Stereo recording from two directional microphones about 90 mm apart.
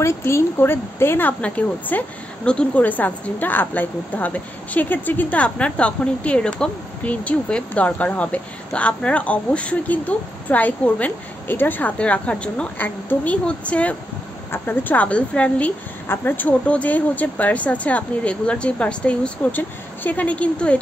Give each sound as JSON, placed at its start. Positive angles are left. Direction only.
{"t": 0.0, "sound": "a woman's voice", "side_deg": 30}